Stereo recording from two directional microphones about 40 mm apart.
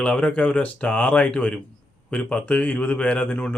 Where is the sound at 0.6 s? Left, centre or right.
Left.